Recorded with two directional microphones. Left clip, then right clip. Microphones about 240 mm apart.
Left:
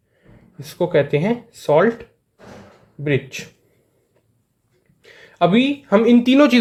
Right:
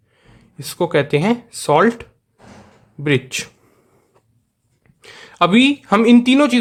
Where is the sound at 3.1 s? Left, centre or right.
Centre.